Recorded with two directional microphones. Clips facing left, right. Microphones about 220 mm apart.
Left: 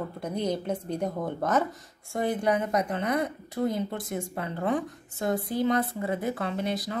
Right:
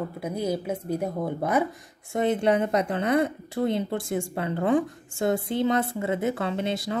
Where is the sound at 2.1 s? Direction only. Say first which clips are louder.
Right 4 dB; 25° right (ahead or behind).